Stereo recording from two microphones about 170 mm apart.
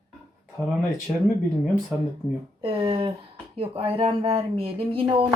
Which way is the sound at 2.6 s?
30° right (ahead or behind).